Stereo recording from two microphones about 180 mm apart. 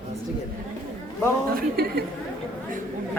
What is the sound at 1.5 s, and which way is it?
Speech, 60° right (ahead or behind).